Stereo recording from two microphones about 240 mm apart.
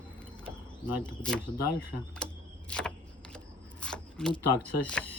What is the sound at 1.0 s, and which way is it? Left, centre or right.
Speech, centre.